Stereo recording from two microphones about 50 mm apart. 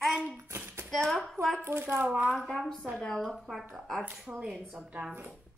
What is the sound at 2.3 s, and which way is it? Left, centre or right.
A woman's voice, centre.